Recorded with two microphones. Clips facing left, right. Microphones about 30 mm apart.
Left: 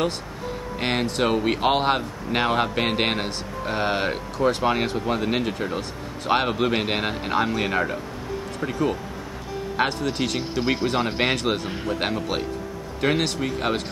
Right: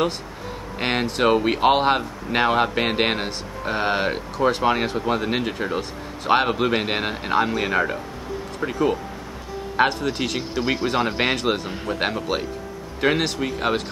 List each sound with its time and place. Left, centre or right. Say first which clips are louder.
0.7 s speech: right 2 dB; centre